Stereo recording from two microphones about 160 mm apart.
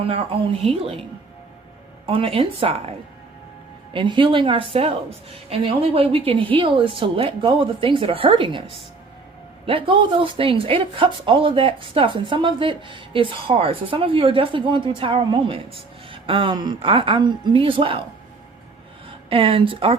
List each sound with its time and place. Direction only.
0.0 s speech: 35° right (ahead or behind)
2.0 s speech: 35° right (ahead or behind)
3.9 s speech: 30° right (ahead or behind)
19.3 s speech: 35° right (ahead or behind)